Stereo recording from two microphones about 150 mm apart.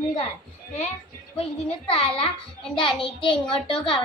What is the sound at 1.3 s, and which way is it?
A child's voice, 40° left (ahead or behind).